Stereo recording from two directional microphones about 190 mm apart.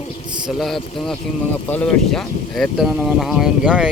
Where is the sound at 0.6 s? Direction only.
Centre (ahead or behind).